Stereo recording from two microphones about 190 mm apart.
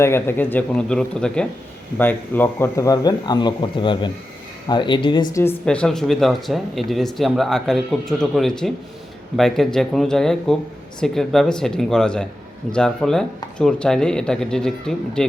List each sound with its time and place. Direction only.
0.0 s speech: 10° left (ahead or behind)